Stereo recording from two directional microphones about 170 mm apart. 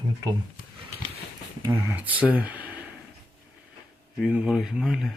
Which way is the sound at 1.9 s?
10° right (ahead or behind).